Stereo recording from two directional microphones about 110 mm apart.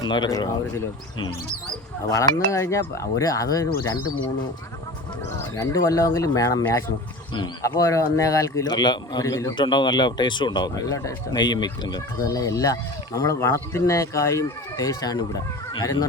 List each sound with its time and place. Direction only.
0.0 s speech: 40° left (ahead or behind)
2.0 s speech: 30° left (ahead or behind)
5.5 s speech: 30° left (ahead or behind)
9.2 s speech: 30° left (ahead or behind)
9.6 s speech: 45° left (ahead or behind)